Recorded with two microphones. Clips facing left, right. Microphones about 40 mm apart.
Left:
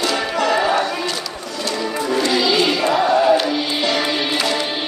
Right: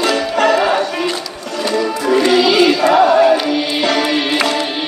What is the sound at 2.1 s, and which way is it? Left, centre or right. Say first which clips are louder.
Music: right 6 dB; right.